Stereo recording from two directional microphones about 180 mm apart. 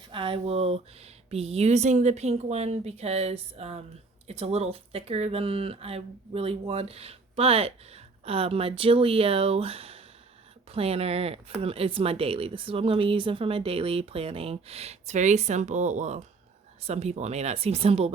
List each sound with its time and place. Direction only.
0.1 s speech: 30° right (ahead or behind)